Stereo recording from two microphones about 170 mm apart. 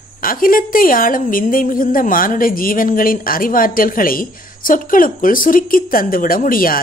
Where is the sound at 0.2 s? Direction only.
55° left (ahead or behind).